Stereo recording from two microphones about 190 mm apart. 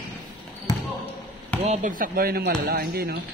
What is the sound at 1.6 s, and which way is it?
Speech, 40° right (ahead or behind).